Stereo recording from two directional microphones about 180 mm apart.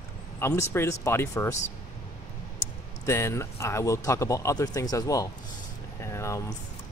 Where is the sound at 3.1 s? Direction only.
15° left (ahead or behind).